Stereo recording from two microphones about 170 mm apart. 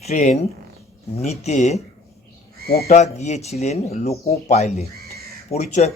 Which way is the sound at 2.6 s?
65° left (ahead or behind).